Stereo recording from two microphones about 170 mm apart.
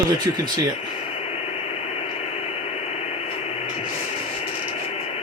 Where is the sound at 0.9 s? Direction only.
35° left (ahead or behind).